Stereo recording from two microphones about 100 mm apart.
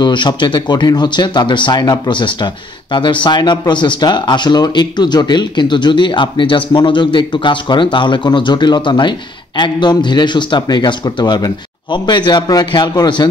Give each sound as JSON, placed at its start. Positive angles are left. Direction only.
{"t": 0.0, "sound": "speech", "side_deg": 50}